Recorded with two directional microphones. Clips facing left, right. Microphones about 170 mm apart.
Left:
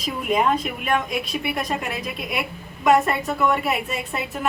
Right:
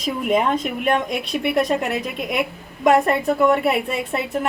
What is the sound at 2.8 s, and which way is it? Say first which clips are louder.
A woman's voice: right 2 dB; 55° right (ahead or behind).